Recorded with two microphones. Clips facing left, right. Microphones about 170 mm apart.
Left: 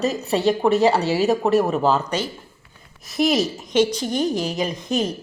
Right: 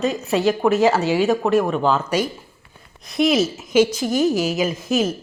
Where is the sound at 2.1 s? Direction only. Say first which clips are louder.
Right 4 dB; 10° right (ahead or behind).